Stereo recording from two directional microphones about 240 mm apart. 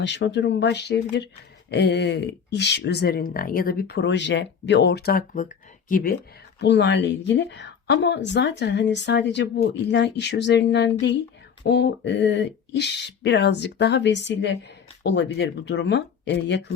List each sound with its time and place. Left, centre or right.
0.0 s speech: left
6.6 s speech: left